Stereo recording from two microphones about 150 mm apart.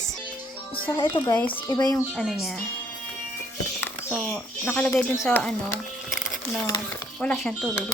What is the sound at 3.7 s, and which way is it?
Speech, 10° left (ahead or behind).